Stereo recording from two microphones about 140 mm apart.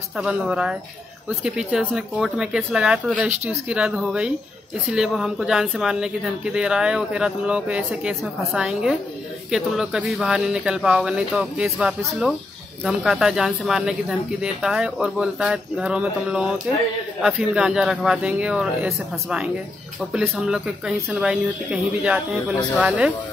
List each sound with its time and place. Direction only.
0.2 s speech: 5° right (ahead or behind)